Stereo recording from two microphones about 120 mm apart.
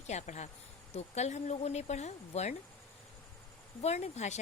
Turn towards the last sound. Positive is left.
turn(degrees=70)  # may be behind; listen again after turning